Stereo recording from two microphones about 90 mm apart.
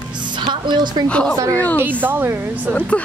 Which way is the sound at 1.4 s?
35° right (ahead or behind).